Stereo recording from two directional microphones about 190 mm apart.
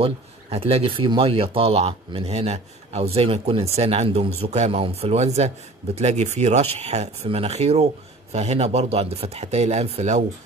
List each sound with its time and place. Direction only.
0.0 s speech: 30° right (ahead or behind)